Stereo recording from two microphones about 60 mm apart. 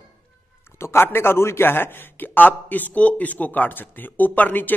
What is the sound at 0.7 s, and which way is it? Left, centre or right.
A man's voice, left.